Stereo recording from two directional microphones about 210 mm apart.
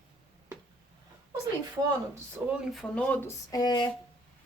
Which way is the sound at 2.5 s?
Centre (ahead or behind).